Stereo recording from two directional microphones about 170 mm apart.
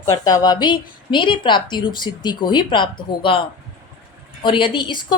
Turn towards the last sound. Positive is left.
turn(degrees=25)  # may be behind; listen again after turning